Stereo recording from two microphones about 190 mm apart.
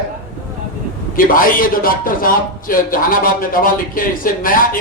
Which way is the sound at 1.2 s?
45° left (ahead or behind).